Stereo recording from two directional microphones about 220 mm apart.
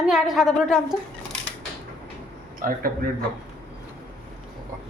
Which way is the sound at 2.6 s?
40° right (ahead or behind).